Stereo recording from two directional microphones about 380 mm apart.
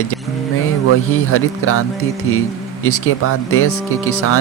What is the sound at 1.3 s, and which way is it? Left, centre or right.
Speech, left.